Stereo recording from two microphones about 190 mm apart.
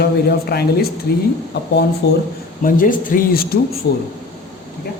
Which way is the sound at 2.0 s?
65° left (ahead or behind).